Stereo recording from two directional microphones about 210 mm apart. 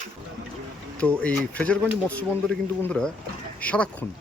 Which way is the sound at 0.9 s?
5° left (ahead or behind).